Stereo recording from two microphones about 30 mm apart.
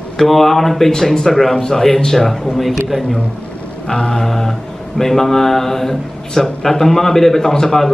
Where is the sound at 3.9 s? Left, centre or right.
Left.